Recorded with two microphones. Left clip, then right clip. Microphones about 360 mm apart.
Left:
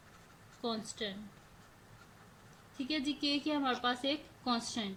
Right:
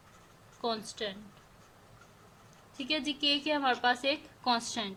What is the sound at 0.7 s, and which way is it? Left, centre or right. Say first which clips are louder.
Speech: right 3 dB; right.